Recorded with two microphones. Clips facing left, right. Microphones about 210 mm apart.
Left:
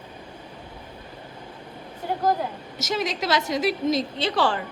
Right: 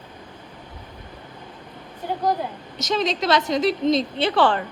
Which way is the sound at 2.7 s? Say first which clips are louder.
Right 4 dB; 20° right (ahead or behind).